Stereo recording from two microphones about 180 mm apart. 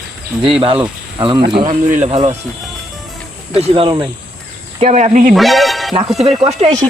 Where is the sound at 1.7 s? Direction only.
45° right (ahead or behind).